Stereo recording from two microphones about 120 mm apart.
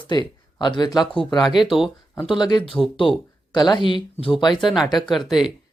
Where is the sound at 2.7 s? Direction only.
Centre (ahead or behind).